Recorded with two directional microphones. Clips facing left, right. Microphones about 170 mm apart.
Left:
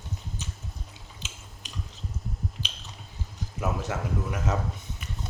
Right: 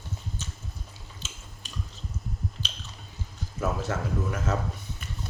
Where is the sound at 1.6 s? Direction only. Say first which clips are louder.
Left 1 dB; 15° left (ahead or behind).